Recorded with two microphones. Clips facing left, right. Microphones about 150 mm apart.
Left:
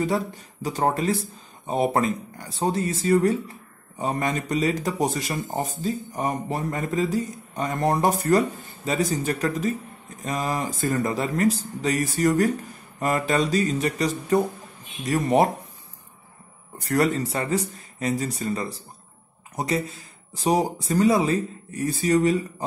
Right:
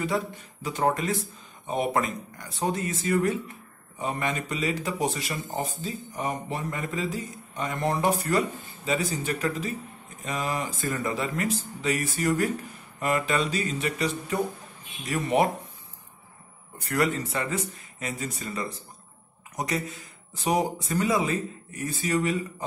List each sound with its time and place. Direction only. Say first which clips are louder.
0.0 s speech: left 4 dB; 35° left (ahead or behind)
16.8 s speech: left 4 dB; 35° left (ahead or behind)